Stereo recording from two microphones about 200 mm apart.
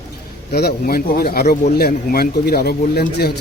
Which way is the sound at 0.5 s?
50° left (ahead or behind).